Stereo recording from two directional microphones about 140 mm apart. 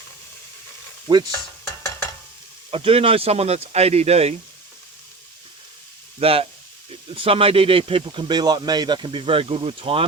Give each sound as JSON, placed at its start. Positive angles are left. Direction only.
{"t": 1.1, "sound": "speech", "side_deg": -35}
{"t": 2.6, "sound": "speech", "side_deg": -45}
{"t": 6.1, "sound": "speech", "side_deg": -45}